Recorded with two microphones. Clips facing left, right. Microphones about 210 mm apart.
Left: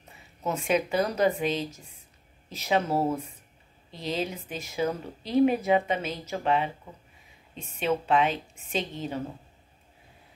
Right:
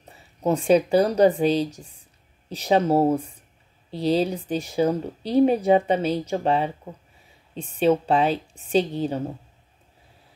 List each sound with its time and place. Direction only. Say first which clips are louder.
0.4 s speech: right 8 dB; 30° right (ahead or behind)